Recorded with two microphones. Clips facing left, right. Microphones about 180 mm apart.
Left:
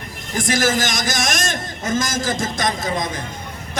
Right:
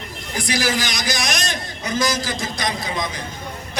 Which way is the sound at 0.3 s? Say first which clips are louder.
Left 3 dB; 50° left (ahead or behind).